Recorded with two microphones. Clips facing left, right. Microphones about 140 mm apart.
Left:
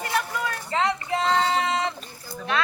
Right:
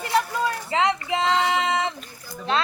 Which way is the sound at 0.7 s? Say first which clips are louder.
Right 1 dB; 20° right (ahead or behind).